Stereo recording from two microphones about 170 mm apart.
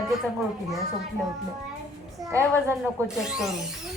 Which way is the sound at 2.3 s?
15° right (ahead or behind).